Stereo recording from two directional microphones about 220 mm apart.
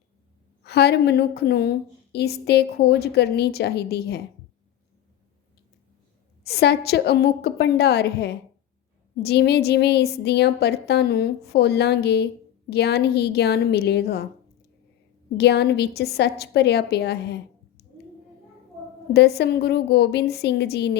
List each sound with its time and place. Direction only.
0.6 s a woman's voice: 50° left (ahead or behind)
6.4 s a woman's voice: 50° left (ahead or behind)
15.4 s a woman's voice: 50° left (ahead or behind)
19.1 s a woman's voice: 45° left (ahead or behind)